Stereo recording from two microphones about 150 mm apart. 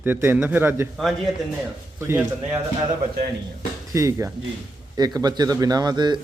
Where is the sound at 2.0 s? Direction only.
15° right (ahead or behind).